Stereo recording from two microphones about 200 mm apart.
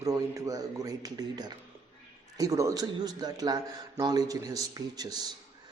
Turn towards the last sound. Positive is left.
turn(degrees=-20)  # may be behind; listen again after turning